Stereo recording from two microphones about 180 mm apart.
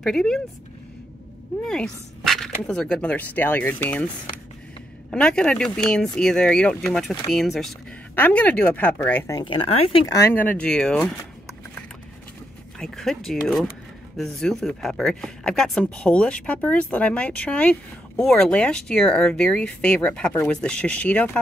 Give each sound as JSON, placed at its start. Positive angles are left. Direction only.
{"t": 0.0, "sound": "speech", "side_deg": 0}
{"t": 1.7, "sound": "speech", "side_deg": 5}
{"t": 5.1, "sound": "speech", "side_deg": 5}
{"t": 9.4, "sound": "speech", "side_deg": 30}
{"t": 10.1, "sound": "speech", "side_deg": 10}